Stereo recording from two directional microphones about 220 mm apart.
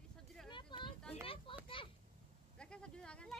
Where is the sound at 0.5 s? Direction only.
20° left (ahead or behind).